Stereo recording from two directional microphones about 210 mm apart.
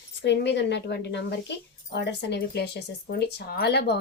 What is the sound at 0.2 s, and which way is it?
A woman's voice, 55° left (ahead or behind).